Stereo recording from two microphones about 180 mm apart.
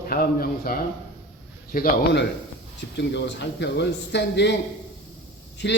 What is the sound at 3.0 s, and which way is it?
Speech, 75° left (ahead or behind).